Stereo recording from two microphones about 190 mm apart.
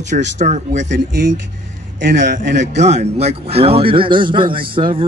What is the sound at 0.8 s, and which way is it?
Speech, 65° right (ahead or behind).